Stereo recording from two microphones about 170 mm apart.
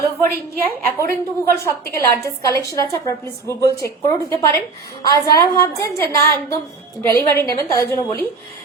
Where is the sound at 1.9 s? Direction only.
15° left (ahead or behind).